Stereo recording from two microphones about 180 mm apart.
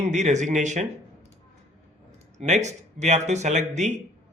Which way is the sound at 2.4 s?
40° right (ahead or behind).